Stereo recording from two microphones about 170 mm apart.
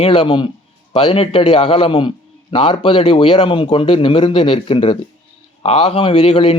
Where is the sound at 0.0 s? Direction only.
30° left (ahead or behind).